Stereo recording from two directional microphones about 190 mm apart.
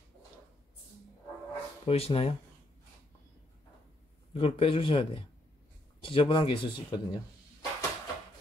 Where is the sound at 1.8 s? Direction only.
30° left (ahead or behind).